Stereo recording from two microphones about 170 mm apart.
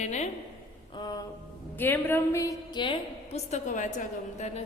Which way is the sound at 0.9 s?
25° left (ahead or behind).